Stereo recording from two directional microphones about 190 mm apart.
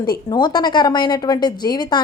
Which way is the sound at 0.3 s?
25° left (ahead or behind).